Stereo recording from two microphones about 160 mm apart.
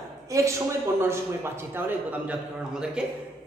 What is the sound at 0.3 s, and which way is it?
A man's voice, 20° right (ahead or behind).